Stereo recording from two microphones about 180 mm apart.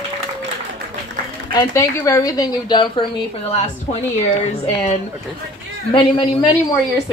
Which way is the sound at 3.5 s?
40° left (ahead or behind).